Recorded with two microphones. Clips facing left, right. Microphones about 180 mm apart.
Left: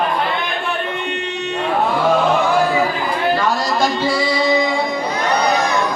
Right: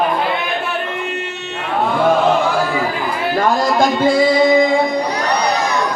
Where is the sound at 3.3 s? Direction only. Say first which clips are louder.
Right 3 dB; 50° right (ahead or behind).